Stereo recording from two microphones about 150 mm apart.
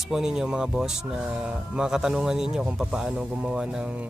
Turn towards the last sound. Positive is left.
turn(degrees=-5)  # may be behind; listen again after turning